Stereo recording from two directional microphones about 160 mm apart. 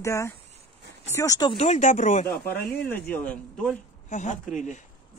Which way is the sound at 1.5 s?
45° left (ahead or behind).